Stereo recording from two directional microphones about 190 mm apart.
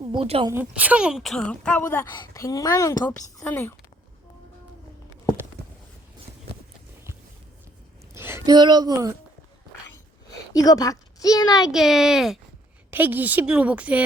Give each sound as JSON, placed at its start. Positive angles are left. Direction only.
{"t": 0.0, "sound": "speech", "side_deg": -25}
{"t": 0.5, "sound": "speech", "side_deg": -10}
{"t": 2.1, "sound": "a woman's voice", "side_deg": 20}
{"t": 5.6, "sound": "a sound", "side_deg": -60}
{"t": 8.1, "sound": "a sound", "side_deg": -15}
{"t": 8.5, "sound": "speech", "side_deg": -25}
{"t": 10.5, "sound": "a woman's voice", "side_deg": 20}
{"t": 11.7, "sound": "a woman's voice", "side_deg": 0}